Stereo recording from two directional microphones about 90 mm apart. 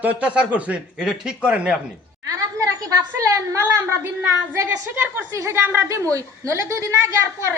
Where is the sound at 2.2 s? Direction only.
35° right (ahead or behind).